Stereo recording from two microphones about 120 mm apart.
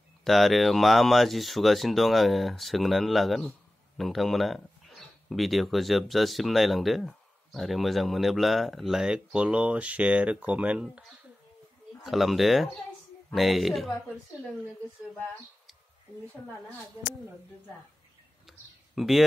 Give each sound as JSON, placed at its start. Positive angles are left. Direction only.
{"t": 0.2, "sound": "speech", "side_deg": 0}
{"t": 18.9, "sound": "speech", "side_deg": 0}